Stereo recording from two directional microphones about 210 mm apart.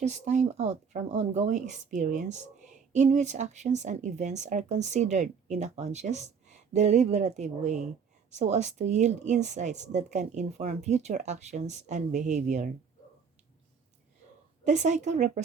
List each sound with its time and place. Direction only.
0.0 s speech: 35° right (ahead or behind)
14.6 s speech: 35° right (ahead or behind)